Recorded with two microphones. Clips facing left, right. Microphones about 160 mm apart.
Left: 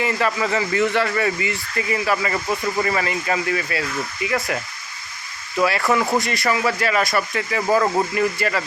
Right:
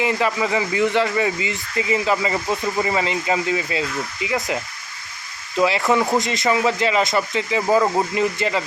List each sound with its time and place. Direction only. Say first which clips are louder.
0.0 s speech: right 1 dB; 15° right (ahead or behind)